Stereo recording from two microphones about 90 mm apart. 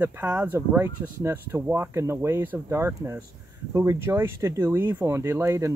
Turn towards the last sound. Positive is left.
turn(degrees=-35)  # may be behind; listen again after turning